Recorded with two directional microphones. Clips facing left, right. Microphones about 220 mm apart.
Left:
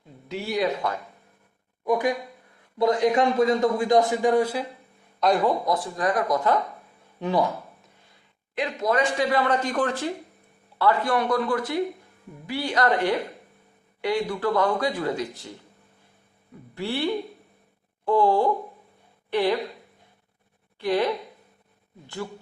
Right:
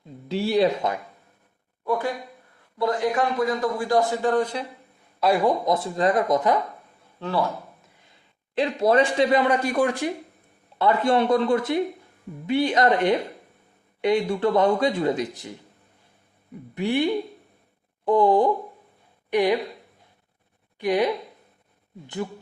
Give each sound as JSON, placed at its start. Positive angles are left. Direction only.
{"t": 0.3, "sound": "a man's voice", "side_deg": -30}
{"t": 1.8, "sound": "a man's voice", "side_deg": 15}
{"t": 5.2, "sound": "speech", "side_deg": -10}
{"t": 5.6, "sound": "speech", "side_deg": -25}
{"t": 7.2, "sound": "speech", "side_deg": 15}
{"t": 8.5, "sound": "a man's voice", "side_deg": -30}
{"t": 9.3, "sound": "speech", "side_deg": -15}
{"t": 16.7, "sound": "a woman's voice", "side_deg": -15}
{"t": 20.7, "sound": "speech", "side_deg": -15}